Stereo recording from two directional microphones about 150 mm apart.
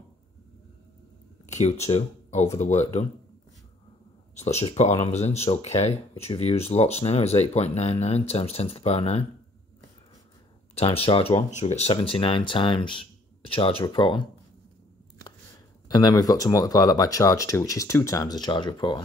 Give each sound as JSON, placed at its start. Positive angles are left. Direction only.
{"t": 1.4, "sound": "speech", "side_deg": 50}
{"t": 4.4, "sound": "speech", "side_deg": 45}
{"t": 10.7, "sound": "speech", "side_deg": 40}
{"t": 15.9, "sound": "speech", "side_deg": 25}